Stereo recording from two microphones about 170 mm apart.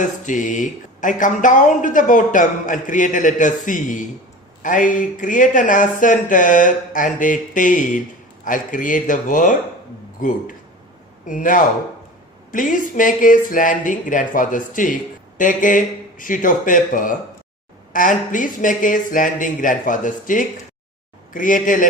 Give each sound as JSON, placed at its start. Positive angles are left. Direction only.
{"t": 0.0, "sound": "speech", "side_deg": 50}